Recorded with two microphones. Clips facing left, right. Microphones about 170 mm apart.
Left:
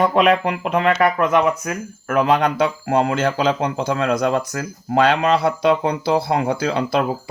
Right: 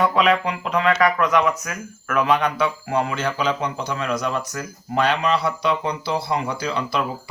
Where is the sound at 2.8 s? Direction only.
80° left.